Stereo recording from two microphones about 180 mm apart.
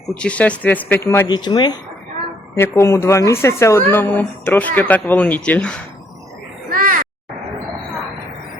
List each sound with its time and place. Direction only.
0.1 s speech: 5° left (ahead or behind)
1.4 s speech: 25° left (ahead or behind); by 5.8 s 5° left (ahead or behind)
6.7 s a sound: 50° right (ahead or behind)